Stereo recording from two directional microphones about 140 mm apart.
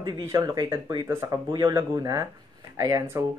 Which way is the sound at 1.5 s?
35° right (ahead or behind).